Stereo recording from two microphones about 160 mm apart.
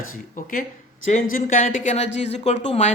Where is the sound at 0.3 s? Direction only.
60° left (ahead or behind).